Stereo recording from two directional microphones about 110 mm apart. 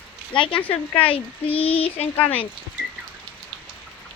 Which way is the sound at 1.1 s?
60° left (ahead or behind).